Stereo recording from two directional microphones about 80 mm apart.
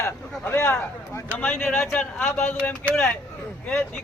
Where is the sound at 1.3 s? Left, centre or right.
Left.